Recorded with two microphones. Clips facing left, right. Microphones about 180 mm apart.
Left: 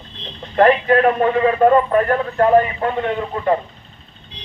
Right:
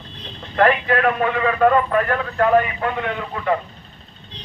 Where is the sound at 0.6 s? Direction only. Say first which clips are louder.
Left 4 dB; 30° left (ahead or behind).